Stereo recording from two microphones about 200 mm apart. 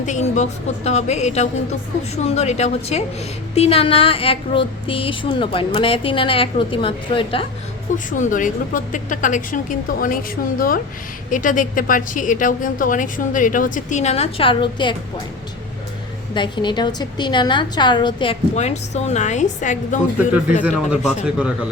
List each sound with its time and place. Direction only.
0.0 s a woman's voice: 35° left (ahead or behind)
7.9 s a woman's voice: 40° left (ahead or behind)
11.3 s a woman's voice: 40° left (ahead or behind); by 14.9 s 25° left (ahead or behind)
16.3 s speech: 25° left (ahead or behind)
20.6 s speech: 5° right (ahead or behind)